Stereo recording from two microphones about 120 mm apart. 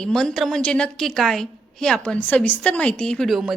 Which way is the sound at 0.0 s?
5° left (ahead or behind).